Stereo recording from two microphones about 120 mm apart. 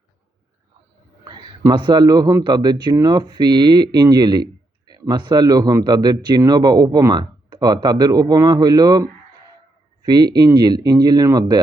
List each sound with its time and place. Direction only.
1.7 s speech: 40° right (ahead or behind)